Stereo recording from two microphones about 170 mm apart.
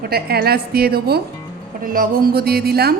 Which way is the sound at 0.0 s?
65° right (ahead or behind).